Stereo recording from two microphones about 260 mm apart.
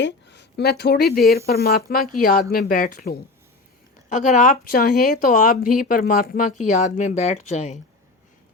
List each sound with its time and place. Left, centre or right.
0.0 s speech: left